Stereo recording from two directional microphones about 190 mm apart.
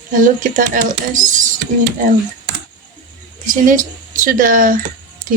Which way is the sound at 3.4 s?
45° right (ahead or behind).